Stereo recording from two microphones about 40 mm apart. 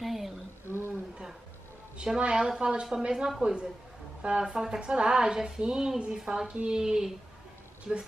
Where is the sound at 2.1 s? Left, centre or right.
Right.